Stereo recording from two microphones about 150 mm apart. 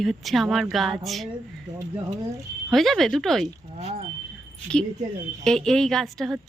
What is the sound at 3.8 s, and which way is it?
Vehicle, 45° right (ahead or behind).